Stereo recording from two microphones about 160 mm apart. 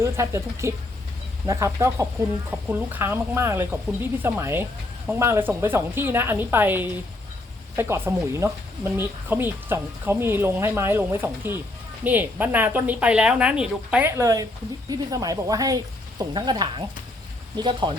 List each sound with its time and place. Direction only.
0.0 s speech: 20° right (ahead or behind)
14.1 s speech: 20° right (ahead or behind)